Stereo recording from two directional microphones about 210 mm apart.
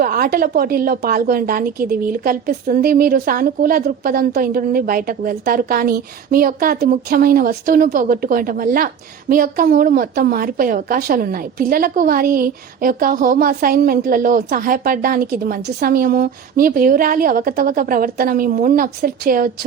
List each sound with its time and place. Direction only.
0.0 s a woman's voice: 45° right (ahead or behind)